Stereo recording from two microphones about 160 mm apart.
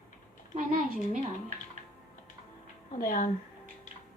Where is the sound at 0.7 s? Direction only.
60° right (ahead or behind).